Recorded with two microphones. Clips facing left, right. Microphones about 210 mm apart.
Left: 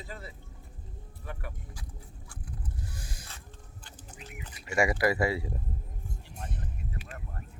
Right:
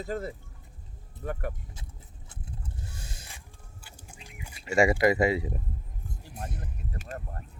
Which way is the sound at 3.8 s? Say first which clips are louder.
Left 2 dB; 10° right (ahead or behind).